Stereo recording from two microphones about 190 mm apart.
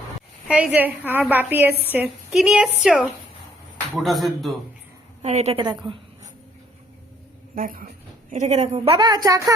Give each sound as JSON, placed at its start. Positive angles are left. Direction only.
{"t": 0.4, "sound": "a woman's voice", "side_deg": -5}
{"t": 5.2, "sound": "a woman's voice", "side_deg": -35}
{"t": 7.5, "sound": "speech", "side_deg": -50}
{"t": 8.3, "sound": "a woman's voice", "side_deg": -35}
{"t": 8.9, "sound": "speech", "side_deg": -20}